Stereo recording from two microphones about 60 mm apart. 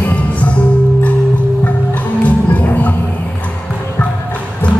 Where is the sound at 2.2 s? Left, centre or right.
Left.